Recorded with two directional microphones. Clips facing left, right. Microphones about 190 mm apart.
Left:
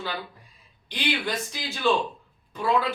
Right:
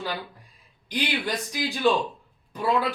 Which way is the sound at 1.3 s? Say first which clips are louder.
Right 3 dB; 15° right (ahead or behind).